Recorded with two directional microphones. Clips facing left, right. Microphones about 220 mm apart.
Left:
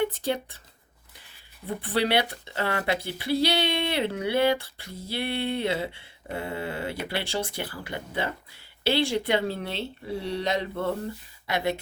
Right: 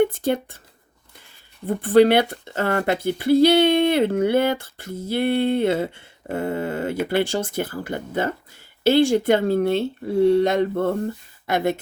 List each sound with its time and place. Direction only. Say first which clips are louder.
0.0 s speech: right 7 dB; 50° right (ahead or behind)
1.6 s speech: right 12 dB; 50° right (ahead or behind)